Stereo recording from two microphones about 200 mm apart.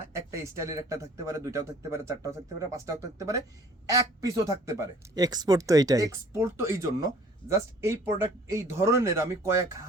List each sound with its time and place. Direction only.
0.1 s speech: 15° right (ahead or behind)